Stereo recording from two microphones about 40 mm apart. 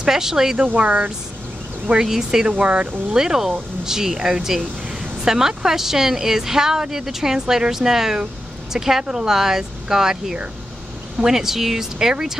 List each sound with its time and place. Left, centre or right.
0.0 s speech: centre
0.7 s speech: right
2.0 s speech: centre
2.6 s speech: right
3.2 s speech: centre